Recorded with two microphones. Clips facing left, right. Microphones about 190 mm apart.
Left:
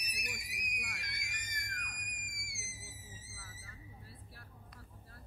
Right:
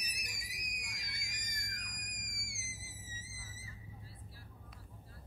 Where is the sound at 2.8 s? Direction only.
60° left (ahead or behind).